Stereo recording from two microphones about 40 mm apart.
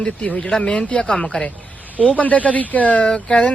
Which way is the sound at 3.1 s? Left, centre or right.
Left.